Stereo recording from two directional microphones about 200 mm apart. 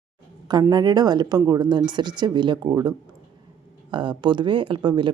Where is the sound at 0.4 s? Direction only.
20° right (ahead or behind).